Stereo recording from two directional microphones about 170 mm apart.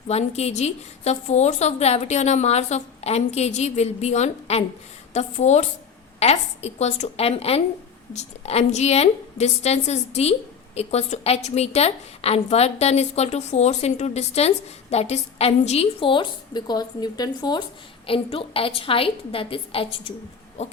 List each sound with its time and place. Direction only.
0.1 s a woman's voice: 40° left (ahead or behind)